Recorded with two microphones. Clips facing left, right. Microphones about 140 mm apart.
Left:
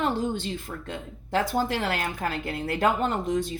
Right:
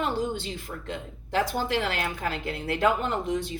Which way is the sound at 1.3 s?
40° left (ahead or behind).